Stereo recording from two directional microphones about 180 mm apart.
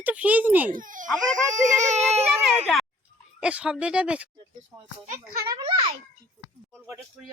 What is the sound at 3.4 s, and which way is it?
Speech, 5° right (ahead or behind).